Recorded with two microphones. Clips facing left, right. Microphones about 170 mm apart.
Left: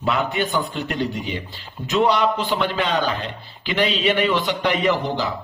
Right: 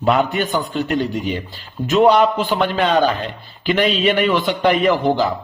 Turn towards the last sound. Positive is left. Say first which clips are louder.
# right 5 dB
turn(degrees=-50)  # may be behind; listen again after turning